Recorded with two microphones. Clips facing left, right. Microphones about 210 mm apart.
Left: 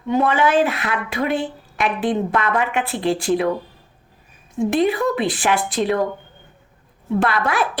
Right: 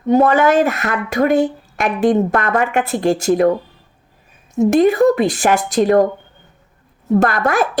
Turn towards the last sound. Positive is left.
turn(degrees=-45)  # may be behind; listen again after turning